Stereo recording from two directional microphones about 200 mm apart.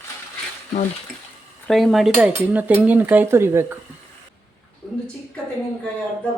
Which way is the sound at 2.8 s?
10° right (ahead or behind).